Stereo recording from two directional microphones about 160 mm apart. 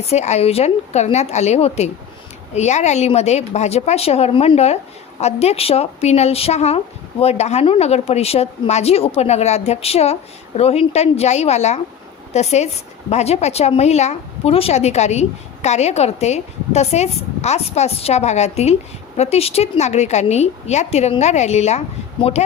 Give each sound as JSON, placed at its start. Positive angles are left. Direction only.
{"t": 0.0, "sound": "speech", "side_deg": 45}